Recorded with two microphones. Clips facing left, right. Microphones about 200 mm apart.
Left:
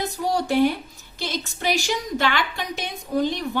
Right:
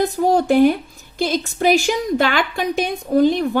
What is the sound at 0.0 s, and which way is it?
A woman's voice, 50° right (ahead or behind).